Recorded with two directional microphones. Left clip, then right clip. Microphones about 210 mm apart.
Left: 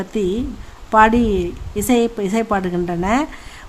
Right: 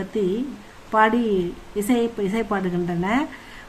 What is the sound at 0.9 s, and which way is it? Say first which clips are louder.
A woman's voice: left 6 dB; 40° left (ahead or behind).